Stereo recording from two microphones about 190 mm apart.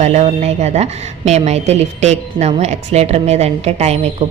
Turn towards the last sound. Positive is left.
turn(degrees=-35)  # may be behind; listen again after turning